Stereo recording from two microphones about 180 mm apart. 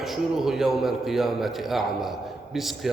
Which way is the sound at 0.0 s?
Centre (ahead or behind).